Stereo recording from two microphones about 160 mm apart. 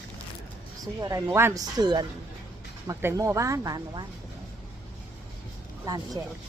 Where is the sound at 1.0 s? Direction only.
20° right (ahead or behind).